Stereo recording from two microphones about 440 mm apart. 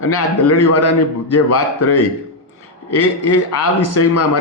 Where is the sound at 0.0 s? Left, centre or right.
Left.